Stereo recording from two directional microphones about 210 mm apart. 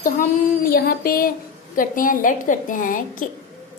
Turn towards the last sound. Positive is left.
turn(degrees=40)  # may be behind; listen again after turning